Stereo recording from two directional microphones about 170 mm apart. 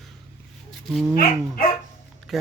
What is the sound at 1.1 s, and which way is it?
Speech, 60° left (ahead or behind).